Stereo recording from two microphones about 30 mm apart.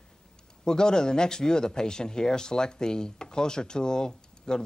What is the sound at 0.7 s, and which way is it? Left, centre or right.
Speech, left.